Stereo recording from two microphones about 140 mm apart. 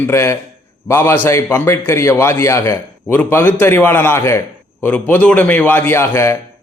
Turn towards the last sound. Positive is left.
turn(degrees=20)  # may be behind; listen again after turning